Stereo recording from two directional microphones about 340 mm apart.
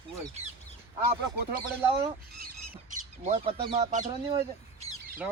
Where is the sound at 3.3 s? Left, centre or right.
Centre.